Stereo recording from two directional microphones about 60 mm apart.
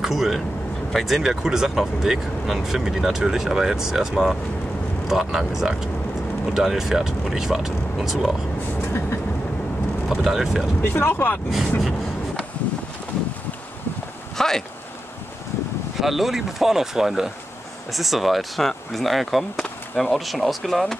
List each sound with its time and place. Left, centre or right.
0.0 s speech: centre
8.8 s vehicle: left
10.0 s speech: centre
10.8 s speech: left
14.3 s a sound: centre
16.0 s speech: centre